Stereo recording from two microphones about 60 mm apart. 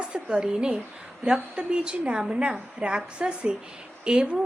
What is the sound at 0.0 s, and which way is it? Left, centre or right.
A woman's voice, centre.